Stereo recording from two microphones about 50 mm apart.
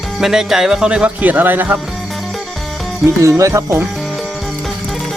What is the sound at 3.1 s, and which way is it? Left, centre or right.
Speech, right.